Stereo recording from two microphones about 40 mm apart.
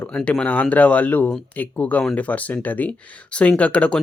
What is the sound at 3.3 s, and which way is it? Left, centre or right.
Speech, left.